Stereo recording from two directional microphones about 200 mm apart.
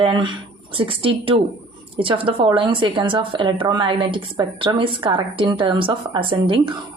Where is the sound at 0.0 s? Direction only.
25° right (ahead or behind).